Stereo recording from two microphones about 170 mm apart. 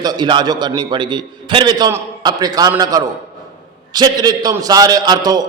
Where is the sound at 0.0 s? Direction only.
25° right (ahead or behind).